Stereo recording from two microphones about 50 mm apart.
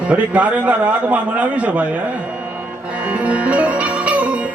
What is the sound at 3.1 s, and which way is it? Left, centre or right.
Music, right.